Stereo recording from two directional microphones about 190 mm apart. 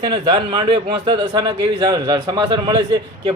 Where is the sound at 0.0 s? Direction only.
25° right (ahead or behind).